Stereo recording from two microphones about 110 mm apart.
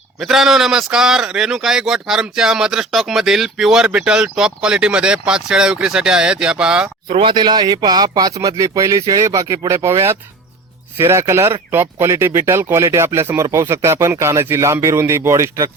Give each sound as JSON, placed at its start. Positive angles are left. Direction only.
{"t": 0.2, "sound": "a man's voice", "side_deg": -5}
{"t": 7.1, "sound": "a man's voice", "side_deg": -50}